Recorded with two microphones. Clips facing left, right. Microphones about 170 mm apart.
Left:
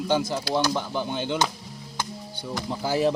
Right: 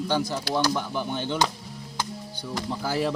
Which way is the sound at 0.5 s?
25° left (ahead or behind).